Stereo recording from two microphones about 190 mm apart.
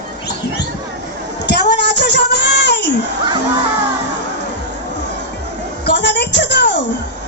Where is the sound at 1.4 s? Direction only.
60° left (ahead or behind).